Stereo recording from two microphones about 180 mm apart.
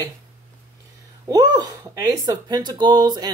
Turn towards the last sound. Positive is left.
turn(degrees=-20)  # may be behind; listen again after turning